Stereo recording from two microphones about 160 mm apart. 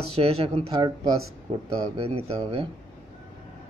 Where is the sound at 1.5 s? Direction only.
35° right (ahead or behind).